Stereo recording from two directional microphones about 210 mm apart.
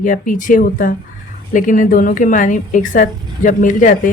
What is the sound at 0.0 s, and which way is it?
A woman's voice, 40° left (ahead or behind).